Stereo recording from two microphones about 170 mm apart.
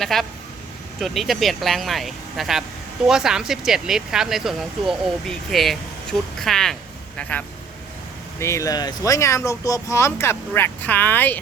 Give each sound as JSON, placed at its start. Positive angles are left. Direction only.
{"t": 0.0, "sound": "speech", "side_deg": 0}